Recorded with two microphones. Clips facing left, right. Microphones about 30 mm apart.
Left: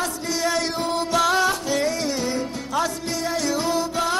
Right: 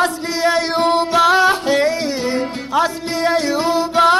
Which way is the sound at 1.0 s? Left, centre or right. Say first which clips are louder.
Right 5 dB; right.